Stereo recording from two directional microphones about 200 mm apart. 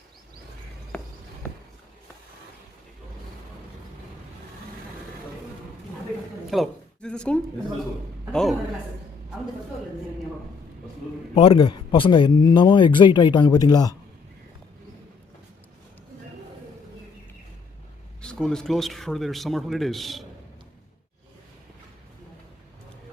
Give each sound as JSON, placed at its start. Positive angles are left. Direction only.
{"t": 6.5, "sound": "a woman's voice", "side_deg": 0}
{"t": 11.3, "sound": "speech", "side_deg": 25}
{"t": 18.2, "sound": "speech", "side_deg": 5}